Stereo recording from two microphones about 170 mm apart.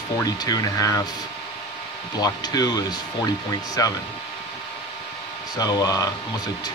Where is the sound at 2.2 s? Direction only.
20° left (ahead or behind).